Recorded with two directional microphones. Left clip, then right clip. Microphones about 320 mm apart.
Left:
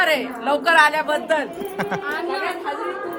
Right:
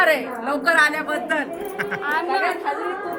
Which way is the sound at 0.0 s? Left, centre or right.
Centre.